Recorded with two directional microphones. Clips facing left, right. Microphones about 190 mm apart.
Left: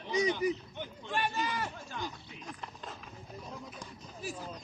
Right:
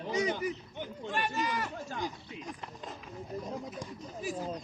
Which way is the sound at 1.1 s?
30° left (ahead or behind).